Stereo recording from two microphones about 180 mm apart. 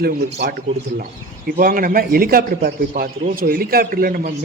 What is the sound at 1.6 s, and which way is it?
A man's voice, 50° right (ahead or behind).